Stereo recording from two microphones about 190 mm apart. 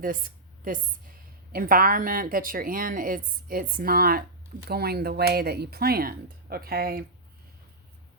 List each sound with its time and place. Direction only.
1.5 s speech: 50° right (ahead or behind)